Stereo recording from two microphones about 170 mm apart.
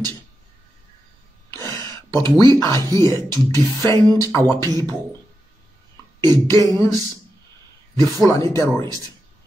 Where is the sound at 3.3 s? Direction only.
20° left (ahead or behind).